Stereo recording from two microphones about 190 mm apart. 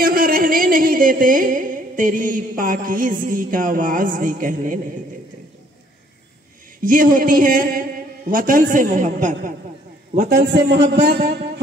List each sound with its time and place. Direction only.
0.0 s music: 50° right (ahead or behind)
6.8 s speech: 45° right (ahead or behind)
10.3 s a man's voice: 65° right (ahead or behind)